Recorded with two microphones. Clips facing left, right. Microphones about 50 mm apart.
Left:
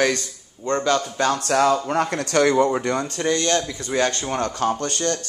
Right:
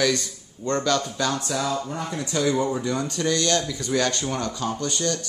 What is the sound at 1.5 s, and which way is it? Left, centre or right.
Speech, left.